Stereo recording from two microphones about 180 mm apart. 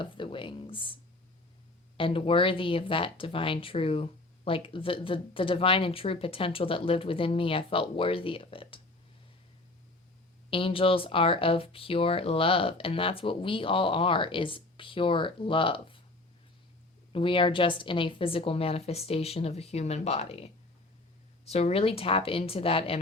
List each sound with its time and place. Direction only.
0.0 s a sound: 30° left (ahead or behind)
2.0 s speech: 30° left (ahead or behind)
10.5 s speech: 30° left (ahead or behind)
17.1 s a woman's voice: 30° left (ahead or behind)